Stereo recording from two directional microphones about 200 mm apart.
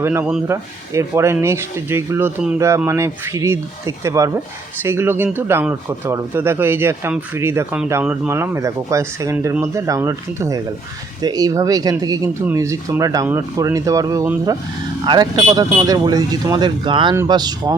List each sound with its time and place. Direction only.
0.0 s speech: 10° right (ahead or behind)